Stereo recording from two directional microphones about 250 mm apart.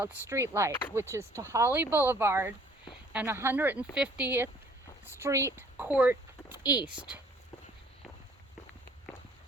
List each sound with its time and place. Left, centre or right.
0.0 s speech: centre